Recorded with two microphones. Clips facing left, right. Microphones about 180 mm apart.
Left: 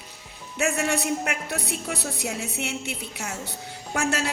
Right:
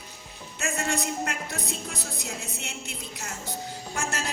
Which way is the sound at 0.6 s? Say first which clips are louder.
Left 5 dB; 70° left (ahead or behind).